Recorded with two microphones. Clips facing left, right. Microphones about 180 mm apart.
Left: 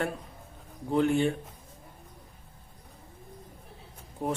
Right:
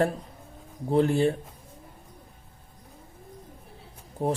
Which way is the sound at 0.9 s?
35° right (ahead or behind).